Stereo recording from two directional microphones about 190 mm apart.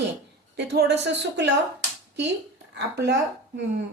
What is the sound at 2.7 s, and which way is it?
Speech, 60° right (ahead or behind).